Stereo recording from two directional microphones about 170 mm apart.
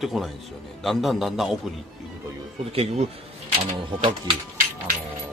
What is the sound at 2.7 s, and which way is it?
Speech, 35° right (ahead or behind).